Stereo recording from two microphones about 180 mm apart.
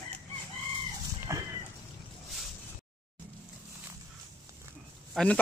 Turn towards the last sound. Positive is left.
turn(degrees=5)  # may be behind; listen again after turning